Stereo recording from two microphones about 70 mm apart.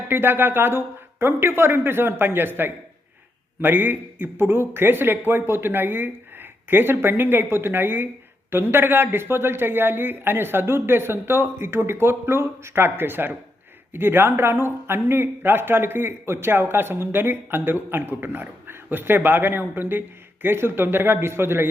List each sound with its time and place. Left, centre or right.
0.1 s speech: right